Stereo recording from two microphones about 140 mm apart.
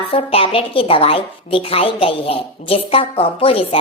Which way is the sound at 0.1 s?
45° left (ahead or behind).